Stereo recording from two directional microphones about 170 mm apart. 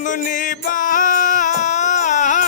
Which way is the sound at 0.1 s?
50° left (ahead or behind).